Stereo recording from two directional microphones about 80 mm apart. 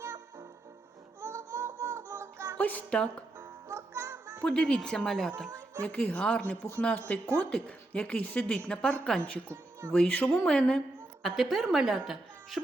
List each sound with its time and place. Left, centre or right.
0.0 s music: right
2.6 s a woman's voice: centre
3.3 s music: right
4.4 s a woman's voice: centre
5.5 s a sound: right
5.8 s a woman's voice: centre